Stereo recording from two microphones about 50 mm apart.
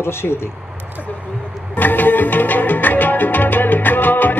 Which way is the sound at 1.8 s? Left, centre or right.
Left.